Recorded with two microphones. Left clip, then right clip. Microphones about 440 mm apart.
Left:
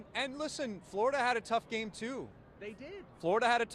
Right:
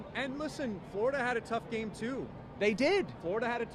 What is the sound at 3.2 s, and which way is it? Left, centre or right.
Speech, left.